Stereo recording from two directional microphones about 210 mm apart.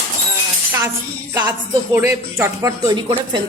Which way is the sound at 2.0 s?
15° right (ahead or behind).